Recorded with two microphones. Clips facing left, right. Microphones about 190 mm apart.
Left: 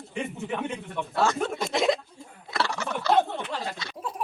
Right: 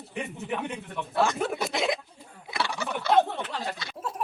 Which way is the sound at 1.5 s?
Centre (ahead or behind).